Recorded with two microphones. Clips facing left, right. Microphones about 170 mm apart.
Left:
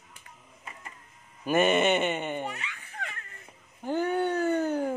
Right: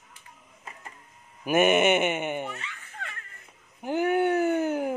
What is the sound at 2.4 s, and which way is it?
Dog, 15° left (ahead or behind).